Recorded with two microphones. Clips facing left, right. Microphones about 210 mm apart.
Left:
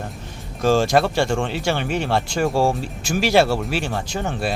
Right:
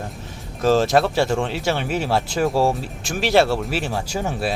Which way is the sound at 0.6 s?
Centre (ahead or behind).